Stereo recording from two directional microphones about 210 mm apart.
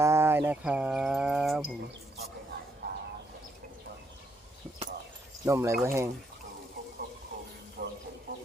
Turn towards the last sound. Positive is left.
turn(degrees=-50)  # may be behind; listen again after turning